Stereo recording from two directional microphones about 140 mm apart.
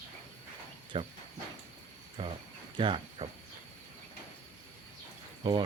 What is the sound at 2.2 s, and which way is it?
Speech, 35° right (ahead or behind).